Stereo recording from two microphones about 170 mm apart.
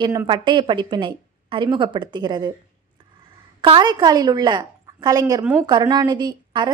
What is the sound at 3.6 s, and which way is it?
Speech, 25° right (ahead or behind).